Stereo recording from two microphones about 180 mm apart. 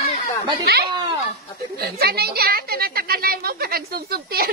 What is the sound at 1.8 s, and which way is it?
Speech, 60° right (ahead or behind).